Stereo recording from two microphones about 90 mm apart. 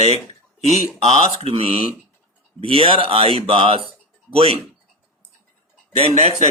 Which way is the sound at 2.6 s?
80° right.